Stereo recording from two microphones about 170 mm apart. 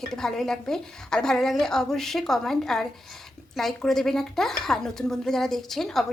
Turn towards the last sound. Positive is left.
turn(degrees=0)  # may be behind; listen again after turning